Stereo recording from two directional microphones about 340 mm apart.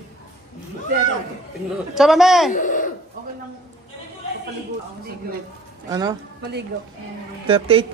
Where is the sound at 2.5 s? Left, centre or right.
Left.